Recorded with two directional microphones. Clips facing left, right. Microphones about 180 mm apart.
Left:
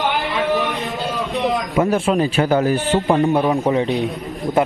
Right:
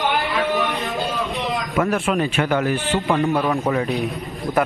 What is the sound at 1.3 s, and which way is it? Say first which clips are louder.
Speech: left 6 dB; 20° left (ahead or behind).